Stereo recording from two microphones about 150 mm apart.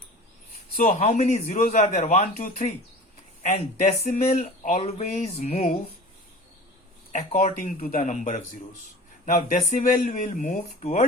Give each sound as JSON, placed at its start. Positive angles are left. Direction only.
{"t": 1.0, "sound": "speech", "side_deg": 50}
{"t": 4.1, "sound": "speech", "side_deg": 60}
{"t": 7.1, "sound": "speech", "side_deg": 60}